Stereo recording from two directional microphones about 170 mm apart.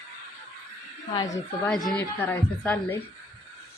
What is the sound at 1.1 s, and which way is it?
Speech, 20° left (ahead or behind).